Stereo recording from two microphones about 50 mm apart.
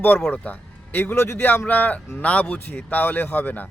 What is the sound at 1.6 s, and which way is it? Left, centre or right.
Speech, left.